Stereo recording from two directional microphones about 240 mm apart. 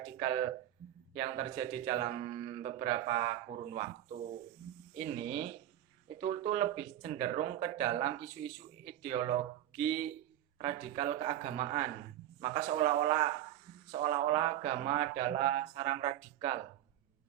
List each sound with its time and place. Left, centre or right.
1.1 s speech: right